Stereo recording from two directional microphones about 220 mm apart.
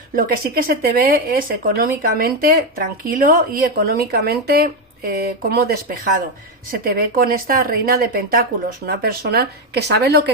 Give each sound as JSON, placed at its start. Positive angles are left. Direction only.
{"t": 0.2, "sound": "a woman's voice", "side_deg": -45}